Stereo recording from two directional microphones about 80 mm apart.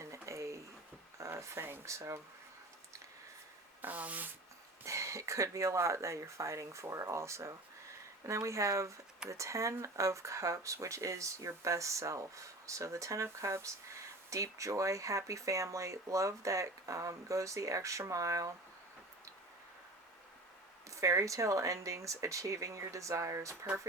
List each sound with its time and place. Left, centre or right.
0.0 s a sound: right
1.2 s speech: right
3.8 s speech: right
4.8 s speech: right
20.9 s speech: right